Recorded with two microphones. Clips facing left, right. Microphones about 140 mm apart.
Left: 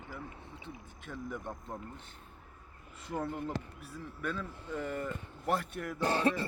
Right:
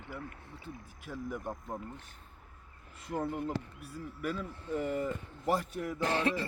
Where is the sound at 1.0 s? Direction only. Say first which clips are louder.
Right 2 dB; 5° right (ahead or behind).